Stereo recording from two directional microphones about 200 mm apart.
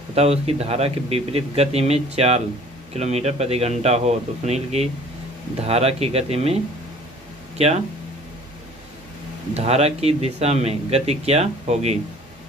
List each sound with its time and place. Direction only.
0.1 s speech: 30° right (ahead or behind)
9.5 s speech: 30° right (ahead or behind)